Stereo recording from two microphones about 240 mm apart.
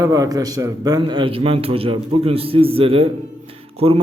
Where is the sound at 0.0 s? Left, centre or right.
Centre.